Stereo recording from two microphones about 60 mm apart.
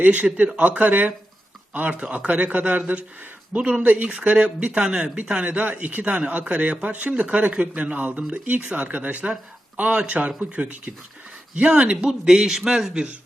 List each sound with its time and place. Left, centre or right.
0.0 s a man's voice: right